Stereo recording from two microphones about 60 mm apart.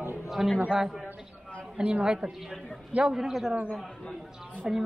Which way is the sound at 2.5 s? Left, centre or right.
Centre.